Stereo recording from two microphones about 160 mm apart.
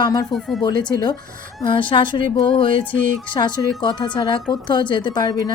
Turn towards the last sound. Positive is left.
turn(degrees=25)  # may be behind; listen again after turning